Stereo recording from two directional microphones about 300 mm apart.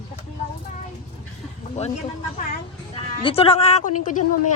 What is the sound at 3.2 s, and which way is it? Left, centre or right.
Speech, centre.